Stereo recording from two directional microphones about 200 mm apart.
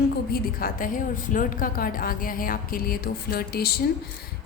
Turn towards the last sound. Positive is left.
turn(degrees=50)  # may be behind; listen again after turning